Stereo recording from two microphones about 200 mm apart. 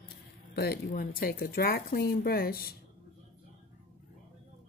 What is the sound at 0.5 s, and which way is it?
Speech, 45° left (ahead or behind).